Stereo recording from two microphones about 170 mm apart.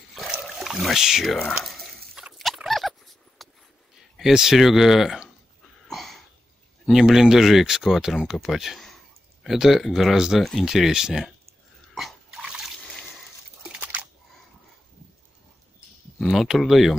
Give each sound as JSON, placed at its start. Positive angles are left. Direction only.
{"t": 0.1, "sound": "a sound", "side_deg": 0}
{"t": 4.2, "sound": "speech", "side_deg": -5}
{"t": 5.9, "sound": "a sound", "side_deg": 0}
{"t": 6.9, "sound": "speech", "side_deg": 0}
{"t": 11.9, "sound": "dog", "side_deg": 0}
{"t": 13.6, "sound": "biting", "side_deg": -5}
{"t": 16.2, "sound": "speech", "side_deg": 0}